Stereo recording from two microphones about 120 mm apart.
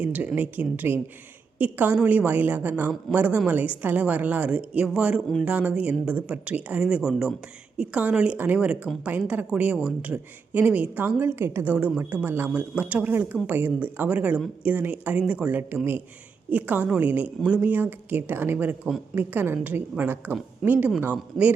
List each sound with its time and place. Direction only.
0.0 s a woman's voice: 15° right (ahead or behind)
20.6 s speech: centre (ahead or behind)
21.0 s a woman's voice: 15° right (ahead or behind)